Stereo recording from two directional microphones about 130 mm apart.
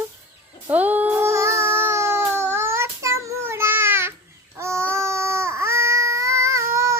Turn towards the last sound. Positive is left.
turn(degrees=-20)  # may be behind; listen again after turning